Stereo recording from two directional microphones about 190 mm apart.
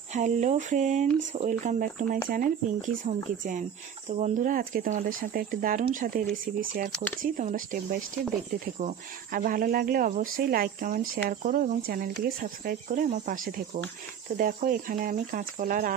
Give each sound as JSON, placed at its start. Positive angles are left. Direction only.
{"t": 0.1, "sound": "speech", "side_deg": -40}